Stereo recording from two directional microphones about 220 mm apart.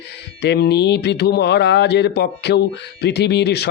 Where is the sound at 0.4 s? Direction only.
50° left (ahead or behind).